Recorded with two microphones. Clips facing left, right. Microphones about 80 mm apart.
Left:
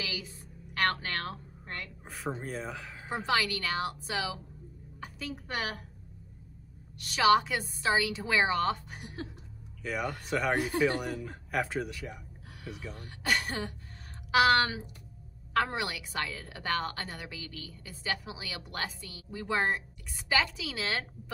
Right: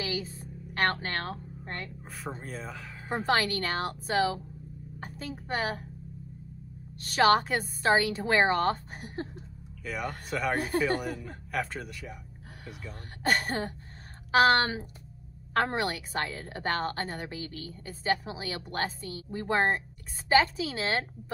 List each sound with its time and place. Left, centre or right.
0.0 s a sound: right
2.0 s speech: centre
3.3 s a woman's voice: right
7.0 s a woman's voice: right
9.8 s speech: centre
12.9 s a woman's voice: right